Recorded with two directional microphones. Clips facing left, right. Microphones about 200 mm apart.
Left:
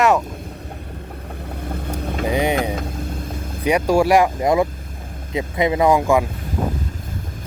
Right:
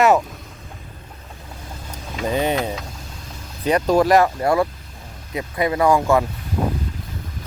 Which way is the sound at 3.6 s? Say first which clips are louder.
Even; 10° left (ahead or behind).